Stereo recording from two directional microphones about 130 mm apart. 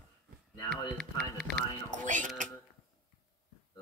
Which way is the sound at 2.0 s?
80° right.